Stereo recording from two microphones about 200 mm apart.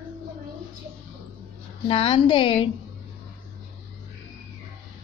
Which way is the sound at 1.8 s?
25° left (ahead or behind).